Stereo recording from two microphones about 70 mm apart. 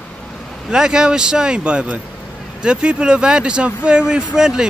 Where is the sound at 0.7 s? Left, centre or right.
Centre.